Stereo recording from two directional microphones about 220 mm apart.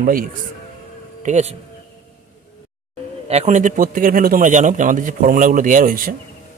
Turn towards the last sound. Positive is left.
turn(degrees=-40)  # may be behind; listen again after turning